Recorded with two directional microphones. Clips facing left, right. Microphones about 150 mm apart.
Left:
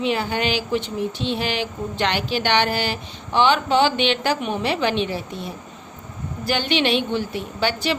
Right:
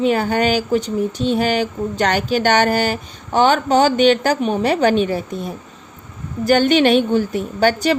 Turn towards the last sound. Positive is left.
turn(degrees=-45)  # may be behind; listen again after turning